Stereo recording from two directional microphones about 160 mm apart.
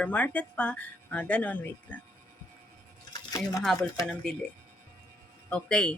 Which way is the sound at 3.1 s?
25° left (ahead or behind).